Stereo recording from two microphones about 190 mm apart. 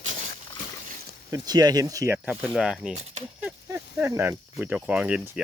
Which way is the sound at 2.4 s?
5° right (ahead or behind).